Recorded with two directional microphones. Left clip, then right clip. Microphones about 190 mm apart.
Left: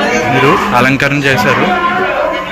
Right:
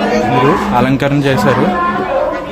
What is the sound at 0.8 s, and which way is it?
Speech, 10° right (ahead or behind).